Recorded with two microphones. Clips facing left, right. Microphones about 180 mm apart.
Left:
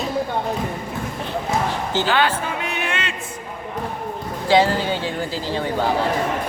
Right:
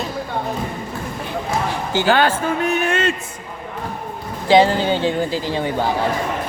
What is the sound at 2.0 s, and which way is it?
Music, 45° right (ahead or behind).